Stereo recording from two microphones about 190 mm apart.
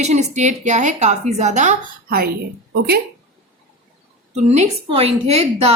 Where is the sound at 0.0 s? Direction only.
35° right (ahead or behind); by 2.3 s 50° right (ahead or behind).